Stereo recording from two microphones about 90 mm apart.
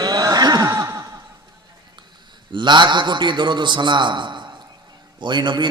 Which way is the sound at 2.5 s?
60° right (ahead or behind).